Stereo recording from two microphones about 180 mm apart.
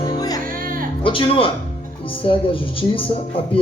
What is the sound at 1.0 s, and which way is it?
Speech, 30° left (ahead or behind).